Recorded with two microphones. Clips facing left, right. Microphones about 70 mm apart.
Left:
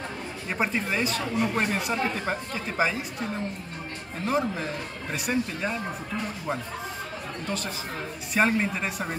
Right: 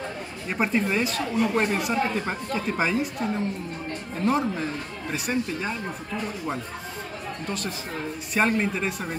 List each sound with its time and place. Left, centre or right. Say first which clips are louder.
0.5 s a woman's voice: right 3 dB; centre
4.3 s a woman's voice: right 2 dB; centre
7.4 s a woman's voice: even; centre